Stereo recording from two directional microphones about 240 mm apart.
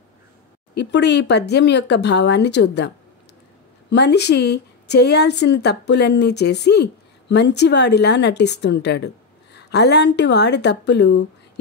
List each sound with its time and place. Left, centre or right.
0.7 s a woman's voice: left
3.9 s a woman's voice: left